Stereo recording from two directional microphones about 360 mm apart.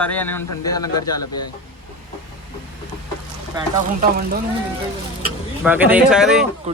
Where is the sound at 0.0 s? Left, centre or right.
Centre.